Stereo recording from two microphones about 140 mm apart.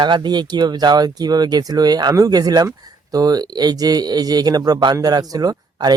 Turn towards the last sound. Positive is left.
turn(degrees=-30)  # may be behind; listen again after turning